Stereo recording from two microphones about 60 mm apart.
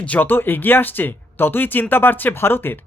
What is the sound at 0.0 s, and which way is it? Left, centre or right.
Speech, left.